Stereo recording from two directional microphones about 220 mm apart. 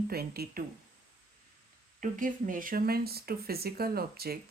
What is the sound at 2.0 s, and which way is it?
Speech, 35° right (ahead or behind).